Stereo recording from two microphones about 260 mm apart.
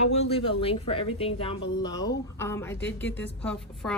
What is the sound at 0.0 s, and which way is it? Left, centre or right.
A woman's voice, left.